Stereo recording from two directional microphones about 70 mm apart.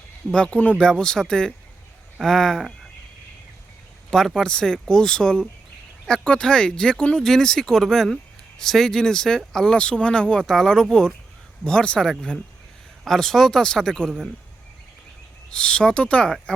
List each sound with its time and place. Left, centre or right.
0.3 s speech: centre
4.4 s speech: centre
15.4 s speech: centre